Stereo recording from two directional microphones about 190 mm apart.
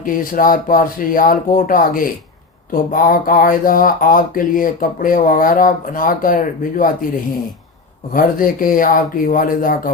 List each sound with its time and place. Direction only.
0.0 s speech: 45° left (ahead or behind)
8.1 s speech: 45° left (ahead or behind)